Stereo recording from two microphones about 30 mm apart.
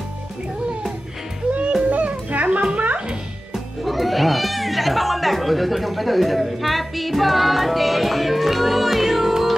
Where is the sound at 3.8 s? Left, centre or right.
Centre.